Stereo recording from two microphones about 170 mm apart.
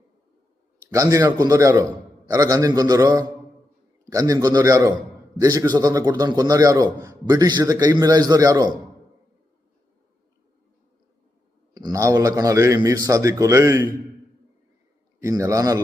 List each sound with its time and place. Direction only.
0.9 s a man's voice: 20° right (ahead or behind)
11.7 s a man's voice: 20° right (ahead or behind)
15.2 s a man's voice: 20° right (ahead or behind)